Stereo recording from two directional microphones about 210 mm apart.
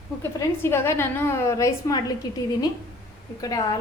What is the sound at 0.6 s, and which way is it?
A woman's voice, 10° left (ahead or behind).